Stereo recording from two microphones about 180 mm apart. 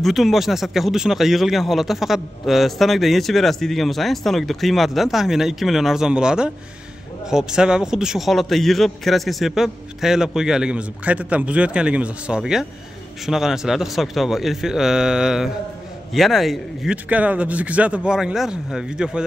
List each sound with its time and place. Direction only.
0.0 s speech: centre (ahead or behind)